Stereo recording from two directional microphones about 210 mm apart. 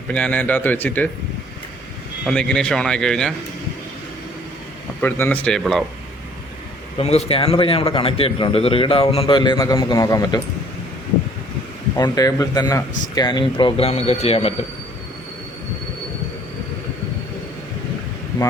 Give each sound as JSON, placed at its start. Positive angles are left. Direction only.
{"t": 0.1, "sound": "a man's voice", "side_deg": 5}
{"t": 2.2, "sound": "a man's voice", "side_deg": 5}
{"t": 4.9, "sound": "a man's voice", "side_deg": 10}
{"t": 7.0, "sound": "a man's voice", "side_deg": 30}
{"t": 11.9, "sound": "a man's voice", "side_deg": 15}